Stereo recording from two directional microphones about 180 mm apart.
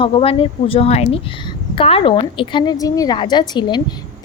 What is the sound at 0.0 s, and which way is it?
A woman's voice, 30° left (ahead or behind).